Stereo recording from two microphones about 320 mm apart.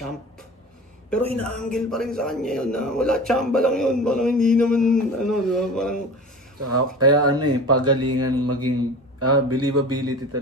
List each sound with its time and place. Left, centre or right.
1.1 s speech: centre
6.6 s a man's voice: right
7.1 s speech: centre
8.1 s a man's voice: right